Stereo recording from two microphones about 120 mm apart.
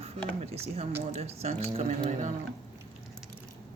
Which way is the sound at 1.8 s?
90° right.